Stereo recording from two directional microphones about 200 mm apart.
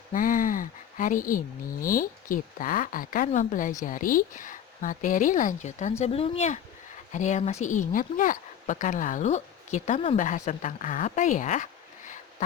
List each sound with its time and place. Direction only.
0.1 s a woman's voice: 45° left (ahead or behind)